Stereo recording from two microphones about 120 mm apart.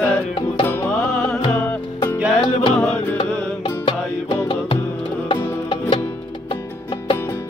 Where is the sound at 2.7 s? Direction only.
5° left (ahead or behind).